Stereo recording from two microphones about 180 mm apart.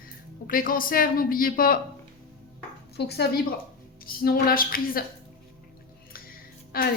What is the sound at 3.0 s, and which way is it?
A woman's voice, 65° left (ahead or behind).